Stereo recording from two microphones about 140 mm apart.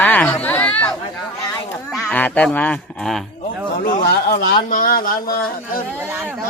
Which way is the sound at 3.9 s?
90° left.